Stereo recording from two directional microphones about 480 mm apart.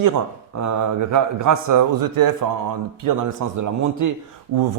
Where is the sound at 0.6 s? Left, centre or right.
Right.